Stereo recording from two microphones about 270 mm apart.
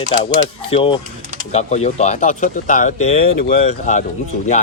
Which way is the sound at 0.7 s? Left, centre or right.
Left.